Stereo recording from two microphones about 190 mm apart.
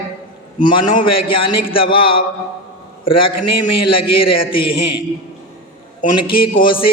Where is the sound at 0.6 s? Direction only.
25° left (ahead or behind).